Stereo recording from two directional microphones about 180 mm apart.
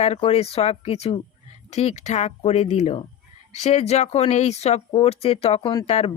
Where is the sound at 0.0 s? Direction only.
35° left (ahead or behind).